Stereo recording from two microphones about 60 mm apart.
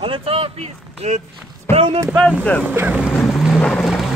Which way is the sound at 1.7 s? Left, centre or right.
Left.